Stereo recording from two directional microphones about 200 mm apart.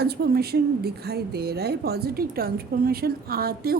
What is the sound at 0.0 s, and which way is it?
A woman's voice, 55° right (ahead or behind).